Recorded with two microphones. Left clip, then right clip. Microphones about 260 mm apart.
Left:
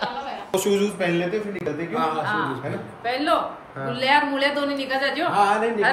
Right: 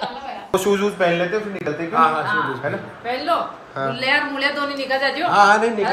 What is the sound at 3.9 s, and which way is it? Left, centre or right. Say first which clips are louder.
Speech: left 1 dB; centre.